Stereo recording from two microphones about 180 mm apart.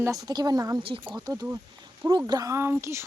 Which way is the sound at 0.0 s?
20° right (ahead or behind).